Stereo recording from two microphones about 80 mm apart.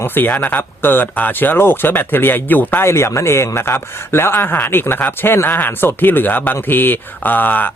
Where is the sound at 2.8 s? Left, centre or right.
Left.